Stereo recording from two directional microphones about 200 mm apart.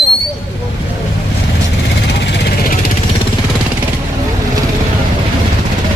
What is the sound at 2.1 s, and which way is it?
Vehicle, 60° left (ahead or behind).